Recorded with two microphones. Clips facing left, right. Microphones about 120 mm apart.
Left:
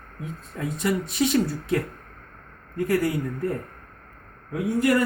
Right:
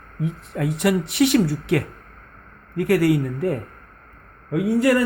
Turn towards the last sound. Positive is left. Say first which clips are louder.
# right 5 dB
turn(degrees=-90)